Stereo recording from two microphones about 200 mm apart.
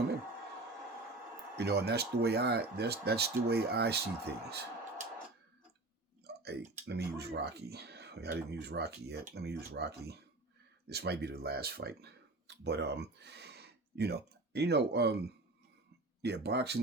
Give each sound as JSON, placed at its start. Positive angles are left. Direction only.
{"t": 1.5, "sound": "speech", "side_deg": -55}
{"t": 6.2, "sound": "a sound", "side_deg": -55}
{"t": 6.8, "sound": "speech", "side_deg": -55}